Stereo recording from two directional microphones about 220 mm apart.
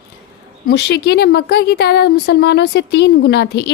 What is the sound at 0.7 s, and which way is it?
Speech, 50° left (ahead or behind).